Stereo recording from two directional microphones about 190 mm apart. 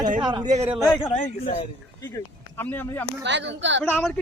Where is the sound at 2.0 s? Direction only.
15° left (ahead or behind).